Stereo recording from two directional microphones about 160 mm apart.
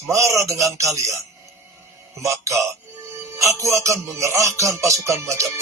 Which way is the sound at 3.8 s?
20° right (ahead or behind).